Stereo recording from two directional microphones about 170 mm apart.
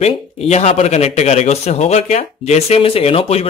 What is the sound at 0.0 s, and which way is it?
A man's voice, 40° left (ahead or behind).